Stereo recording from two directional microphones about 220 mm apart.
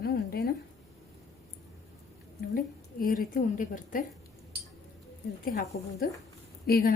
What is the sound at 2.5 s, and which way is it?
A woman's voice, 40° left (ahead or behind).